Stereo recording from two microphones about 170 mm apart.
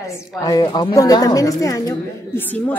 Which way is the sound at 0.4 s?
25° left (ahead or behind).